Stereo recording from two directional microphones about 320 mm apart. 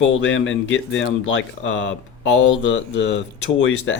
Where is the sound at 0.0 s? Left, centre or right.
Left.